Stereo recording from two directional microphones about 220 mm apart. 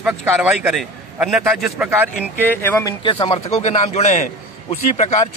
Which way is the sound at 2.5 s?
10° left (ahead or behind).